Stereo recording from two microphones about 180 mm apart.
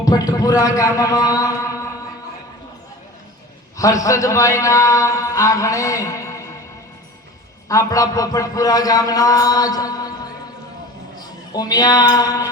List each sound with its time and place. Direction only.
0.0 s a man's voice: 20° left (ahead or behind)
3.8 s a man's voice: 20° left (ahead or behind)
7.7 s a man's voice: 20° left (ahead or behind)